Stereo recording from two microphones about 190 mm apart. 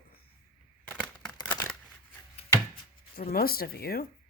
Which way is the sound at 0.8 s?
Centre (ahead or behind).